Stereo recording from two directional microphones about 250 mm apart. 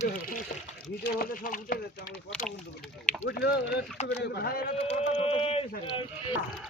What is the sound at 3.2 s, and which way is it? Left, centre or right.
Speech, left.